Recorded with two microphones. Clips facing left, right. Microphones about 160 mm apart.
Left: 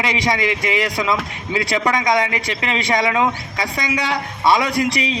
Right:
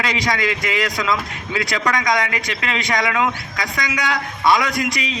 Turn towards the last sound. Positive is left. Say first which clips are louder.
# left 3 dB
turn(degrees=30)  # may be behind; listen again after turning